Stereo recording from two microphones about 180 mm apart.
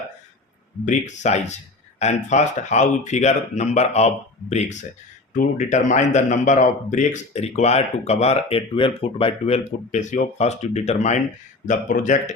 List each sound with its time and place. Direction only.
0.9 s speech: 40° left (ahead or behind)